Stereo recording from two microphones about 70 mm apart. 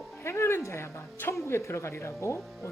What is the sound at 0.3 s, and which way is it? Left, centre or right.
Speech, left.